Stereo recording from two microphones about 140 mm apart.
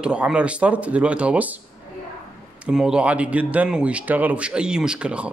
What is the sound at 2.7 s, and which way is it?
A man's voice, 5° right (ahead or behind).